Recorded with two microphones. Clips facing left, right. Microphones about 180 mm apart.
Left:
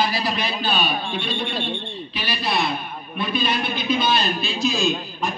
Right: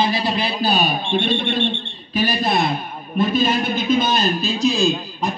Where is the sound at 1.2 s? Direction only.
50° right (ahead or behind).